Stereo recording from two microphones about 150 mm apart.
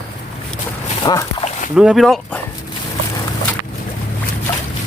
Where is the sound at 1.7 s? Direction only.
5° right (ahead or behind).